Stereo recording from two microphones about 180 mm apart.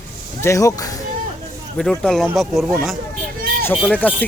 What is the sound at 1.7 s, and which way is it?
Speech, 5° left (ahead or behind).